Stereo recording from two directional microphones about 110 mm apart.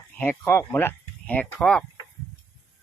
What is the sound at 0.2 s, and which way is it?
Speech, 20° left (ahead or behind).